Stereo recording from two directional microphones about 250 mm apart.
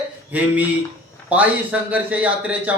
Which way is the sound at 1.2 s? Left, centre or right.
Centre.